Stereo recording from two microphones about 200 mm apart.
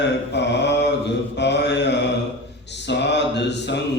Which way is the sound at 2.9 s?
60° left (ahead or behind).